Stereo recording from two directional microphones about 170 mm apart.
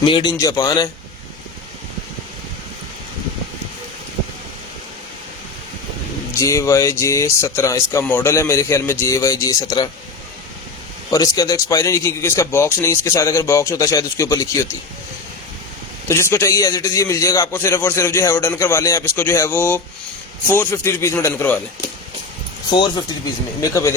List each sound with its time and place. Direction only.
0.0 s a man's voice: 30° left (ahead or behind)
6.3 s a man's voice: 15° left (ahead or behind)
11.1 s a man's voice: 20° left (ahead or behind)
16.0 s a man's voice: 15° left (ahead or behind)
22.7 s a man's voice: 25° left (ahead or behind)